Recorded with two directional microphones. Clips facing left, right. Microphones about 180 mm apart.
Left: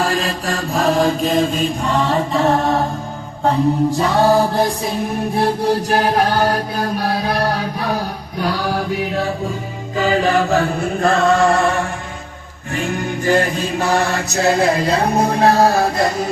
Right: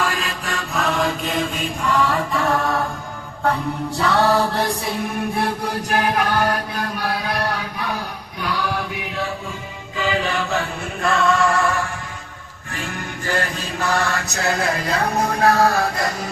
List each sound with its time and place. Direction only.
0.0 s mantra: 35° left (ahead or behind)
12.7 s music: 20° left (ahead or behind)